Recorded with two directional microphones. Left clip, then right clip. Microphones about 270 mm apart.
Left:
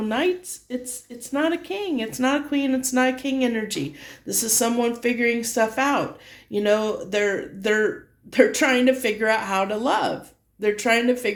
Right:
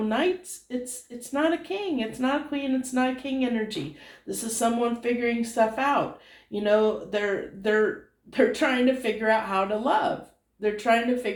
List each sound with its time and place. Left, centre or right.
0.7 s speech: left